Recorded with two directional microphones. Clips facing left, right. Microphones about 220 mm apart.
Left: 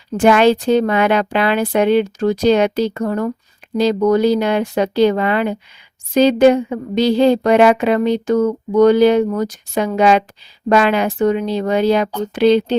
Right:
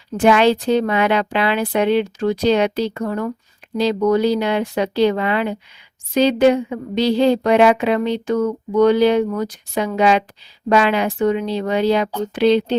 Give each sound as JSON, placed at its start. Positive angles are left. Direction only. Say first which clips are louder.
{"t": 0.2, "sound": "speech", "louder": "left 2 dB", "side_deg": 50}